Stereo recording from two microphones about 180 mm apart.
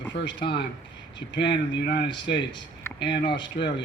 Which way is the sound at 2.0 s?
25° left (ahead or behind).